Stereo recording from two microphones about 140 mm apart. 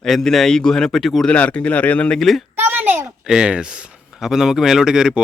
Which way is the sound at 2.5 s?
15° right (ahead or behind).